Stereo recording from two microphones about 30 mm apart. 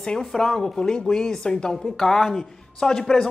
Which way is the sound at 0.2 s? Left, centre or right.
Centre.